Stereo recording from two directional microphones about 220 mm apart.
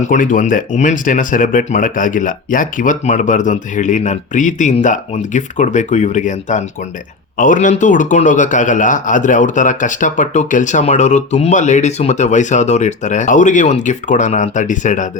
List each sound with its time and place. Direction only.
0.0 s speech: 35° left (ahead or behind)